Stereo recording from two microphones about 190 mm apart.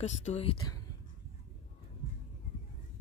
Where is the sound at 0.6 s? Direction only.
20° left (ahead or behind).